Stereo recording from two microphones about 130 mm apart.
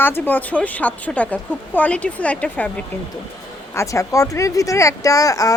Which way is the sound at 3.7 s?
25° left (ahead or behind).